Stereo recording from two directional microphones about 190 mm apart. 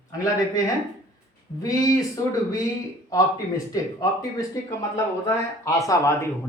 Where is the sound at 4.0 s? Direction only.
15° left (ahead or behind).